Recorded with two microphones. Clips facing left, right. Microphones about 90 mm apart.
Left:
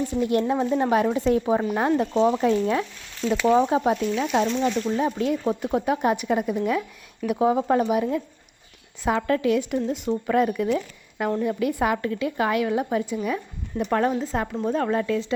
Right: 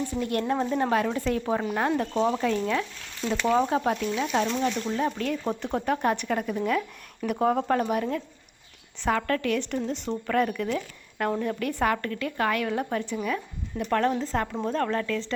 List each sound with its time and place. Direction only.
0.2 s speech: 20° left (ahead or behind)
0.4 s speech: 5° left (ahead or behind)
2.4 s speech: 25° left (ahead or behind)
3.2 s speech: 10° left (ahead or behind)